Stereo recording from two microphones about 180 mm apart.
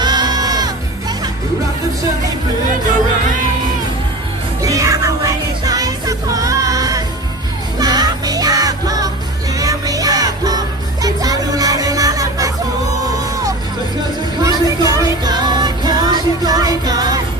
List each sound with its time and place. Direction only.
0.0 s music: 25° right (ahead or behind)
4.6 s music: 20° right (ahead or behind)